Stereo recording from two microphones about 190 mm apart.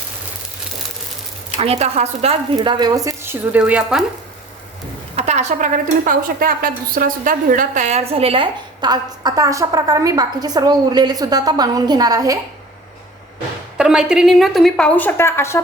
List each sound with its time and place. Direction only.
1.5 s a woman's voice: 30° right (ahead or behind); by 4.0 s 5° right (ahead or behind)
5.1 s a woman's voice: 35° right (ahead or behind); by 12.4 s 20° right (ahead or behind)
13.7 s a woman's voice: 5° right (ahead or behind); by 15.6 s 15° left (ahead or behind)